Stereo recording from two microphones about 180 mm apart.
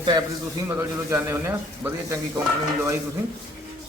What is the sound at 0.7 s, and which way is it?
A man's voice, 10° right (ahead or behind).